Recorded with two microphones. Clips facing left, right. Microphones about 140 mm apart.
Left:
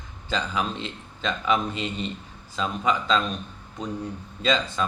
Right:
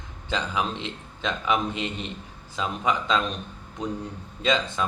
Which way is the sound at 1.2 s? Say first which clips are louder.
Left 1 dB; 15° right (ahead or behind).